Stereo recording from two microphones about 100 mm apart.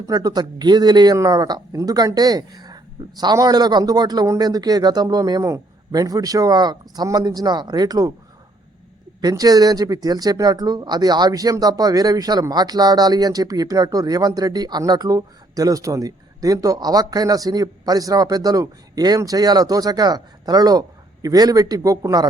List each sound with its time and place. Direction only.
0.0 s speech: 40° right (ahead or behind)
9.2 s speech: 40° right (ahead or behind)